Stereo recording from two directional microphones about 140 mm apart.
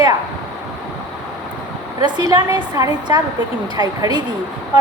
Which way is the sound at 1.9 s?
30° right (ahead or behind).